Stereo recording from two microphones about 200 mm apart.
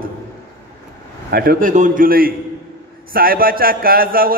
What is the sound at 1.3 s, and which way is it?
A man's voice, 50° right (ahead or behind).